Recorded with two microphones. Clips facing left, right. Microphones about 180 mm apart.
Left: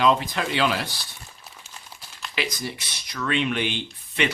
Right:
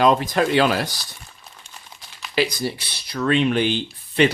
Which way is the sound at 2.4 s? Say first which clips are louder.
Right 8 dB; 35° right (ahead or behind).